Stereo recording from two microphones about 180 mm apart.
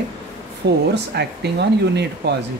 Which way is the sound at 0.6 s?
75° right (ahead or behind).